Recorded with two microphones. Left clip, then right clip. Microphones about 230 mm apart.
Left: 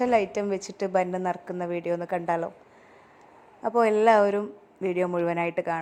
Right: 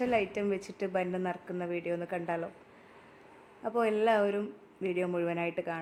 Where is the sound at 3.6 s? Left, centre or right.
Centre.